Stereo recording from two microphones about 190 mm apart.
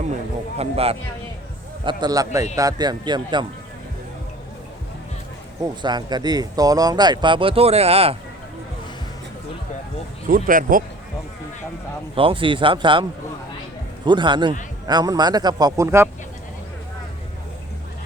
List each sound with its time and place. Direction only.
0.5 s speech: 30° right (ahead or behind)
5.6 s speech: 20° right (ahead or behind)
10.2 s speech: 45° right (ahead or behind)
12.1 s speech: 25° right (ahead or behind)